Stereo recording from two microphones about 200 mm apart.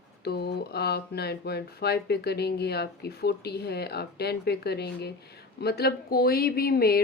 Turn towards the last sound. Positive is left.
turn(degrees=50)  # may be behind; listen again after turning